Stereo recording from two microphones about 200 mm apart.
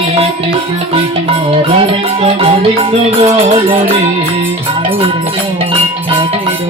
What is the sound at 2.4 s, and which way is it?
Music, 30° right (ahead or behind).